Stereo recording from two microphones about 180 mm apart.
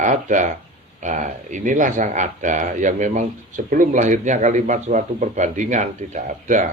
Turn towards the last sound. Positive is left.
turn(degrees=-45)  # may be behind; listen again after turning